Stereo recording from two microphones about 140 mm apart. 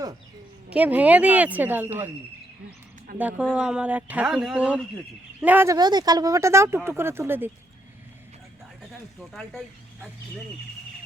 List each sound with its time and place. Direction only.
0.7 s speech: 10° right (ahead or behind)
3.2 s speech: 10° right (ahead or behind)
5.6 s speech: 30° right (ahead or behind)
8.9 s speech: 5° left (ahead or behind)